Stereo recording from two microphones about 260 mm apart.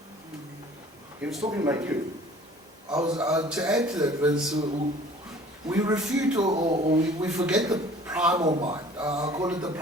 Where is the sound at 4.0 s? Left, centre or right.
Centre.